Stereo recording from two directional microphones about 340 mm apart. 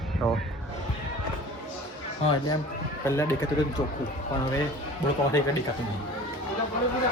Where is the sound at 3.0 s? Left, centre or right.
Centre.